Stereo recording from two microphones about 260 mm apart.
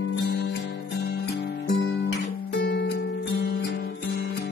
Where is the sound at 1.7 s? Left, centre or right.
Left.